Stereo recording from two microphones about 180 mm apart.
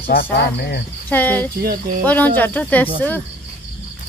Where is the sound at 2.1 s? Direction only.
10° left (ahead or behind).